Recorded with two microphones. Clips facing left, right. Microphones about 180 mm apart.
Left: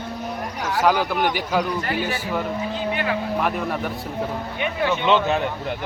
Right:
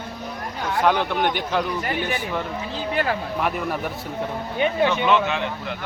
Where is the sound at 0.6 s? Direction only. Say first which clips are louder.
Even; centre (ahead or behind).